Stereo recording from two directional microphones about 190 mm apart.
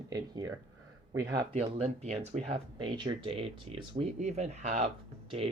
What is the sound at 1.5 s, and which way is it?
Speech, 35° right (ahead or behind).